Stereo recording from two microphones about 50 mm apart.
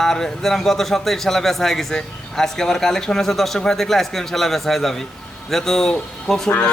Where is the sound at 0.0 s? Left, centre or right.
Centre.